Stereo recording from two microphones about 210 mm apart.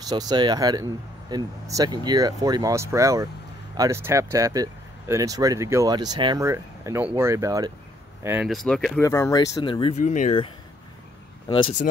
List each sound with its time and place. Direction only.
0.1 s speech: 20° right (ahead or behind)
8.5 s speech: centre (ahead or behind)
9.0 s speech: 15° left (ahead or behind)